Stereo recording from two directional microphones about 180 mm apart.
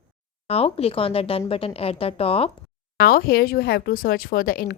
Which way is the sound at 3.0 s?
55° left (ahead or behind).